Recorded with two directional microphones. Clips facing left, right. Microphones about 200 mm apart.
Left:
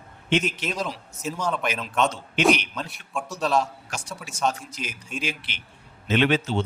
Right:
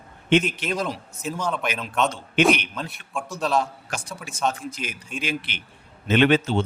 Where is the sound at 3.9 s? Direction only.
60° right (ahead or behind).